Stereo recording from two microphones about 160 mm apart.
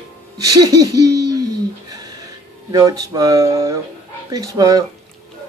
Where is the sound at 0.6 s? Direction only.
25° right (ahead or behind).